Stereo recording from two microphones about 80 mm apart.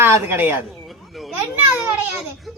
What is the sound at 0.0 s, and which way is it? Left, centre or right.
Speech, right.